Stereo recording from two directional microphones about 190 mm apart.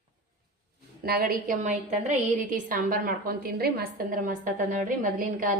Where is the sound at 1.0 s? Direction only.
50° right (ahead or behind).